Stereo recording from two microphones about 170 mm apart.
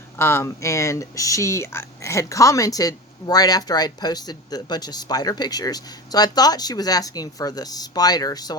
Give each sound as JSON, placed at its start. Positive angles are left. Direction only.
{"t": 0.2, "sound": "speech", "side_deg": 15}